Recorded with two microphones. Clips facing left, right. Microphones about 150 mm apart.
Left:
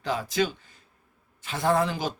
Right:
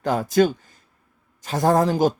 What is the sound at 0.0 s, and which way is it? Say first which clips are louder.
Speech: right 8 dB; 45° right (ahead or behind).